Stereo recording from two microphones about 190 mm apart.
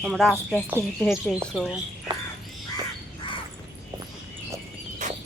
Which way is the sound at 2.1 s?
25° right (ahead or behind).